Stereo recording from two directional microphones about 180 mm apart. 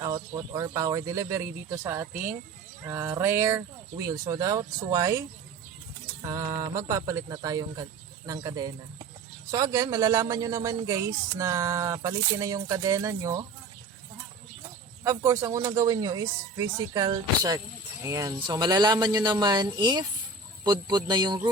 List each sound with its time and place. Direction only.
0.0 s speech: 20° right (ahead or behind)
6.2 s mantra: 20° right (ahead or behind)
7.1 s speech: 15° right (ahead or behind)
15.0 s speech: 20° right (ahead or behind)